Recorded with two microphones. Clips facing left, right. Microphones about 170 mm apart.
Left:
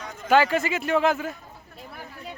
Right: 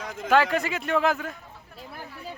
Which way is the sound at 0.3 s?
Centre (ahead or behind).